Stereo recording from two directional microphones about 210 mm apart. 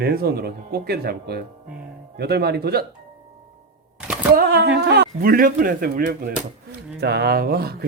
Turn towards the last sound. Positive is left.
turn(degrees=-45)  # may be behind; listen again after turning